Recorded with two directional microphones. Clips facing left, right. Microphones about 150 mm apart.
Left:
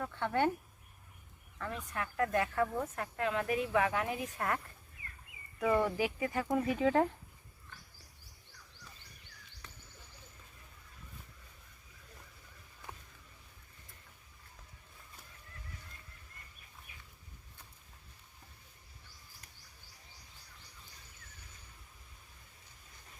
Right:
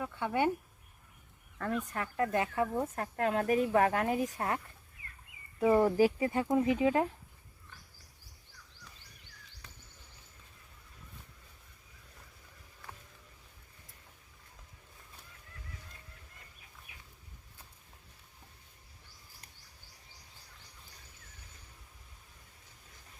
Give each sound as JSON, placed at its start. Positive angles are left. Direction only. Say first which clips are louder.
{"t": 0.0, "sound": "speech", "louder": "right 1 dB", "side_deg": -10}
{"t": 1.5, "sound": "speech", "louder": "right 7 dB", "side_deg": -50}
{"t": 2.0, "sound": "speech", "louder": "left 1 dB", "side_deg": -25}
{"t": 2.8, "sound": "speech", "louder": "right 3 dB", "side_deg": -40}
{"t": 4.4, "sound": "speech", "louder": "right 1 dB", "side_deg": -25}